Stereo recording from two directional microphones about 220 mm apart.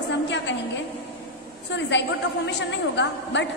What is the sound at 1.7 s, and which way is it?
A woman's voice, 55° left (ahead or behind).